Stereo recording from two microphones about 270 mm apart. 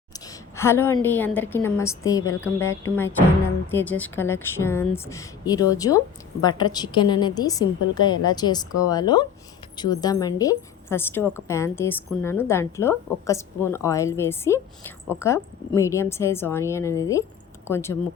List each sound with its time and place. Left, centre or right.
0.3 s a woman's voice: centre